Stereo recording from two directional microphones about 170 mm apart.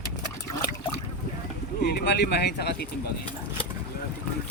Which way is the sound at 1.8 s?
85° left.